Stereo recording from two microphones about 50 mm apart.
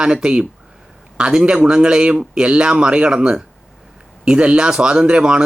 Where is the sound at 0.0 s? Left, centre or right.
Centre.